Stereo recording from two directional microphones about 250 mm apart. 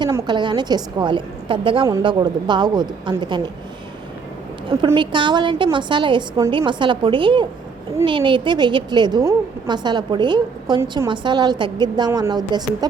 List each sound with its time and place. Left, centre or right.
0.0 s a woman's voice: centre
4.8 s a woman's voice: centre